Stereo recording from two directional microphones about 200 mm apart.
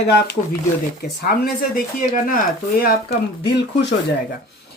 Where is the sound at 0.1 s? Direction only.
50° left (ahead or behind).